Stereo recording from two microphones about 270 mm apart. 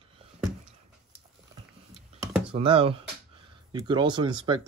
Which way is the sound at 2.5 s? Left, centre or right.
Right.